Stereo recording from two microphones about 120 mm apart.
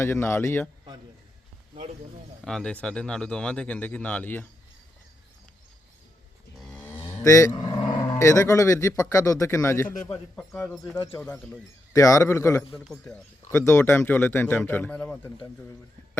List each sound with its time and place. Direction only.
0.0 s speech: 20° left (ahead or behind)
2.4 s speech: 5° left (ahead or behind)
6.8 s cattle: 15° left (ahead or behind)
7.2 s dog: 25° left (ahead or behind)
8.2 s speech: 25° left (ahead or behind)
10.3 s speech: 10° left (ahead or behind)
11.9 s speech: 25° left (ahead or behind)
12.7 s a man's voice: centre (ahead or behind)
13.5 s speech: 20° left (ahead or behind)